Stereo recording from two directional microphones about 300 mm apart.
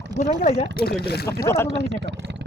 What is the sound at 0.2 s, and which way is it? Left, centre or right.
Speech, left.